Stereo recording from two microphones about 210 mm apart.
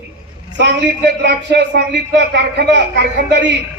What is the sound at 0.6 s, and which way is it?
A man's voice, 55° right (ahead or behind).